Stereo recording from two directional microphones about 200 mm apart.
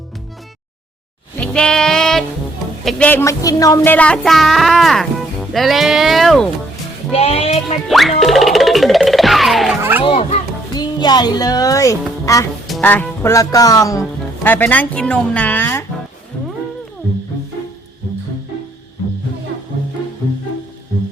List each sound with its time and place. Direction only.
1.4 s sheep: 5° left (ahead or behind)
2.8 s speech: 5° left (ahead or behind)
7.1 s speech: 30° left (ahead or behind)
7.9 s music: centre (ahead or behind)
10.0 s music: 30° left (ahead or behind)
10.8 s speech: 20° left (ahead or behind)
12.6 s speech: 5° left (ahead or behind)